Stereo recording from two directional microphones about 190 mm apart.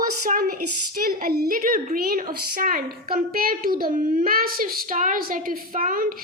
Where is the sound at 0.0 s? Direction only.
45° right (ahead or behind).